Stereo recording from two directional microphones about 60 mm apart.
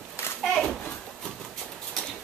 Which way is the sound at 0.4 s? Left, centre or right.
Centre.